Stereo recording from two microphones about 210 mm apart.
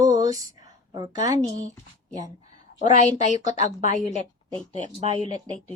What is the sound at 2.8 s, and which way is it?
A woman's voice, 35° left (ahead or behind).